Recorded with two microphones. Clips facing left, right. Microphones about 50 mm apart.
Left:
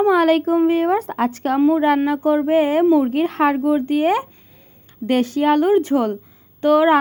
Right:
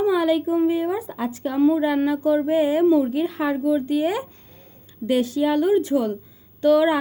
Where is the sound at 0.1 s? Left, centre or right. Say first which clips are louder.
Left 5 dB; left.